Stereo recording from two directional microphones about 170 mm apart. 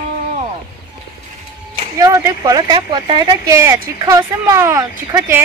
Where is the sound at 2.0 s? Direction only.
20° right (ahead or behind).